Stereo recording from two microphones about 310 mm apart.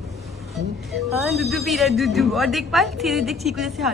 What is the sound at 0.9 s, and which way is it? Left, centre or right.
Speech, centre.